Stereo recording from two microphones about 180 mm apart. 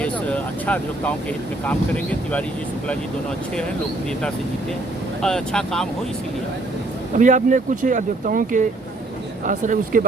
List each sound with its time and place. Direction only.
0.0 s vehicle: 10° left (ahead or behind)
1.6 s speech: 5° left (ahead or behind)
5.2 s speech: 5° left (ahead or behind)
7.2 s speech: 45° right (ahead or behind)